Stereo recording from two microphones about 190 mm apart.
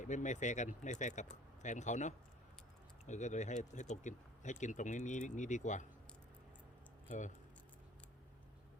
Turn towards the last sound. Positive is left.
turn(degrees=40)  # may be behind; listen again after turning